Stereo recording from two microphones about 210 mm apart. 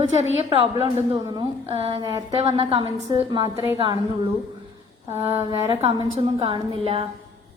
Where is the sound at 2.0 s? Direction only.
15° right (ahead or behind).